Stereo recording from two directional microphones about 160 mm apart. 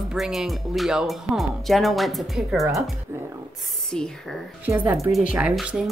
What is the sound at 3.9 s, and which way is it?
Speech, 5° left (ahead or behind).